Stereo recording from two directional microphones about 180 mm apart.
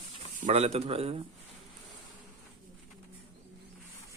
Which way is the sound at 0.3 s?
40° right (ahead or behind).